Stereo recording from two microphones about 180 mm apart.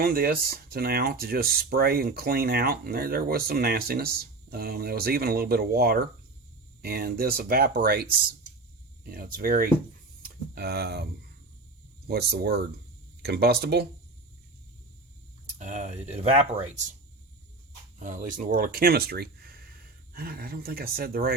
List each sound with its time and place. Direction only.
0.0 s speech: 55° right (ahead or behind)
9.0 s speech: 55° right (ahead or behind)
15.5 s speech: 40° right (ahead or behind)
18.0 s speech: 45° right (ahead or behind)